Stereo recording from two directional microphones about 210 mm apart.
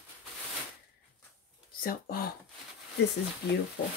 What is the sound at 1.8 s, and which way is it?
Speech, 45° left (ahead or behind).